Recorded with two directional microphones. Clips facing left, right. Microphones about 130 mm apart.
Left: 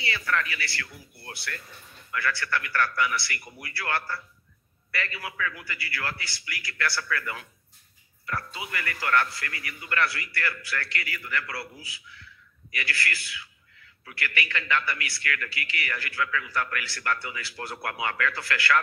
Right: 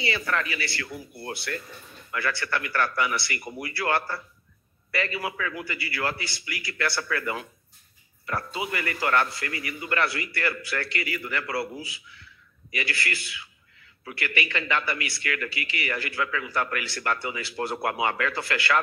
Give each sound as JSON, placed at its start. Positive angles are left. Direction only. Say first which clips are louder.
{"t": 0.0, "sound": "speech", "louder": "right 1 dB", "side_deg": -25}